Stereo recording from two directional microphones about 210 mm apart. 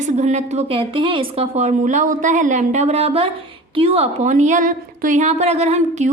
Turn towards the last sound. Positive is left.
turn(degrees=-35)  # may be behind; listen again after turning